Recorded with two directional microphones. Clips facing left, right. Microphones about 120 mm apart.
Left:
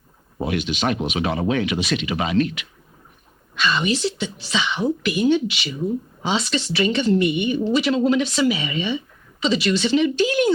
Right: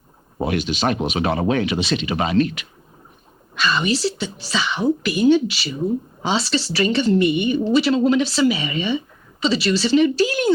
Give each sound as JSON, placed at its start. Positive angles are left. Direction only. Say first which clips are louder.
{"t": 0.3, "sound": "speech", "louder": "right 2 dB", "side_deg": -45}
{"t": 8.7, "sound": "speech", "louder": "right 2 dB", "side_deg": -45}
{"t": 9.4, "sound": "speech", "louder": "right 1 dB", "side_deg": -35}